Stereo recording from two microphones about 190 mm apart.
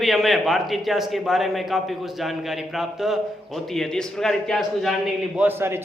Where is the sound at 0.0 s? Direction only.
Centre (ahead or behind).